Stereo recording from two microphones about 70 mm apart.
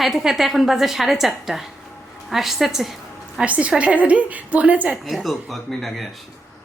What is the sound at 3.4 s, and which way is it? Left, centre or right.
A woman's voice, centre.